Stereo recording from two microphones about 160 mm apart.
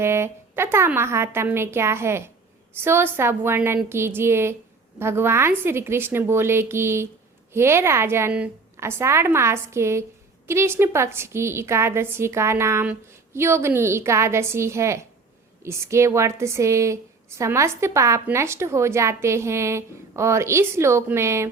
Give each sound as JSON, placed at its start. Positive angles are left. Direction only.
{"t": 0.0, "sound": "a woman's voice", "side_deg": -15}